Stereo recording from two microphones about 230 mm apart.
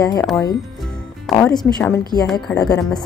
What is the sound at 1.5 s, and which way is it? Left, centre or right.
A woman's voice, centre.